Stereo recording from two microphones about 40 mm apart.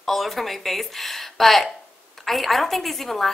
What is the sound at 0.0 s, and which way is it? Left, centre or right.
A woman's voice, centre.